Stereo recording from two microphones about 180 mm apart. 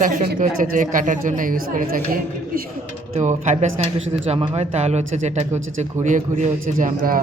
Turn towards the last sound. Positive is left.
turn(degrees=-50)  # may be behind; listen again after turning